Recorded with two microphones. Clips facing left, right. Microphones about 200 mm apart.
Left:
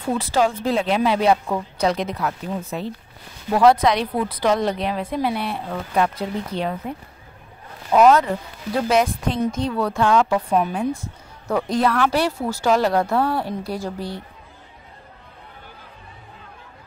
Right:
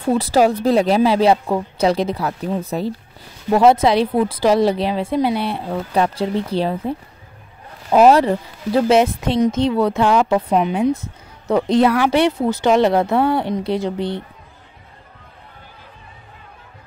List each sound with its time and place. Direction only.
0.1 s speech: 40° right (ahead or behind)
3.5 s a woman's voice: 25° right (ahead or behind)